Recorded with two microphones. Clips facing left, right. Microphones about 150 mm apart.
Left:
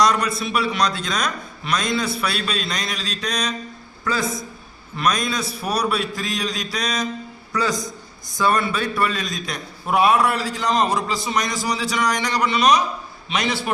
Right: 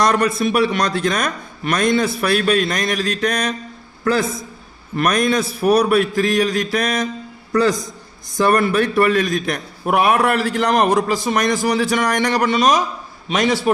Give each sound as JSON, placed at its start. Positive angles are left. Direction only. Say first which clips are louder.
{"t": 0.0, "sound": "a man's voice", "louder": "right 3 dB", "side_deg": -55}